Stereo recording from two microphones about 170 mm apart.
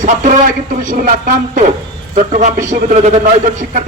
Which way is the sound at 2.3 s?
45° right (ahead or behind).